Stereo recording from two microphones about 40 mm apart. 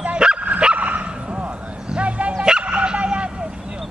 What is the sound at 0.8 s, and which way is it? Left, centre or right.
Dog, right.